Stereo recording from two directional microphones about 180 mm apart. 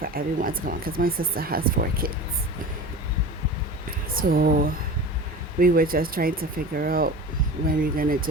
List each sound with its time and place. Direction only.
0.0 s speech: 55° right (ahead or behind)
4.1 s speech: 55° right (ahead or behind)